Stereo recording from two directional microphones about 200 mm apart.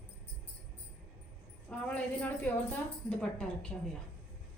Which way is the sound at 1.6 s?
5° left (ahead or behind).